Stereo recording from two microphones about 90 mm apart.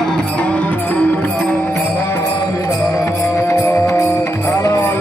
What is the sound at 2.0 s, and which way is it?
Music, 30° left (ahead or behind).